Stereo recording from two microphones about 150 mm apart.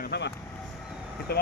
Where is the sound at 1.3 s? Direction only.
90° left.